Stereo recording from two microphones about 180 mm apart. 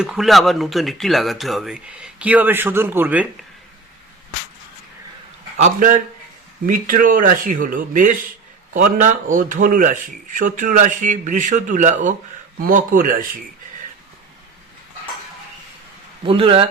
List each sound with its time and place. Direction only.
0.0 s speech: centre (ahead or behind)
5.5 s speech: 45° right (ahead or behind)
16.2 s speech: 30° right (ahead or behind)